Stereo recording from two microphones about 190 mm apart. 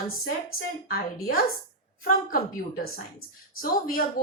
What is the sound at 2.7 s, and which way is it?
Speech, 50° left (ahead or behind).